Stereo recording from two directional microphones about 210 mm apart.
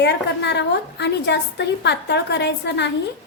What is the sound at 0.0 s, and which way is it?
A woman's voice, 55° left (ahead or behind).